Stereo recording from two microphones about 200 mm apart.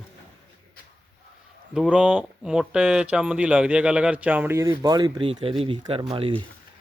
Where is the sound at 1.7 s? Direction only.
5° right (ahead or behind).